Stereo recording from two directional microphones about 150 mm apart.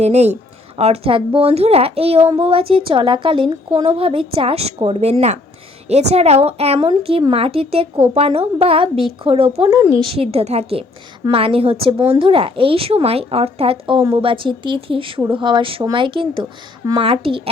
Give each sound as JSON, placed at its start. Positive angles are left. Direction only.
{"t": 0.0, "sound": "a woman's voice", "side_deg": -45}